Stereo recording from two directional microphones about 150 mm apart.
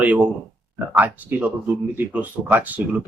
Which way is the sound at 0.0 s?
10° right (ahead or behind).